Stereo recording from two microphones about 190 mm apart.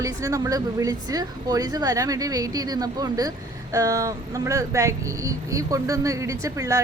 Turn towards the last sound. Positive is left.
turn(degrees=-15)  # may be behind; listen again after turning